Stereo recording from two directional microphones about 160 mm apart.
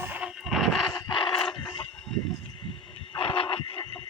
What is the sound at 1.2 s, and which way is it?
Dog, 35° left (ahead or behind).